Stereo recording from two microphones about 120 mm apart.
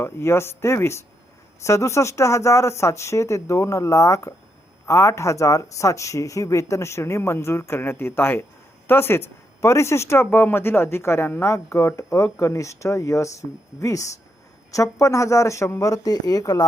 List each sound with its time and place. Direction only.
0.0 s speech: 20° left (ahead or behind)